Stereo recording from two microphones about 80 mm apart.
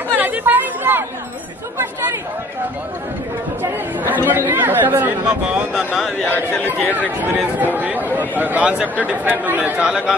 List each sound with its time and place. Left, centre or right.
0.2 s chatter: right
3.6 s chatter: right
6.2 s speech: left
6.9 s speech: right
9.8 s speech: centre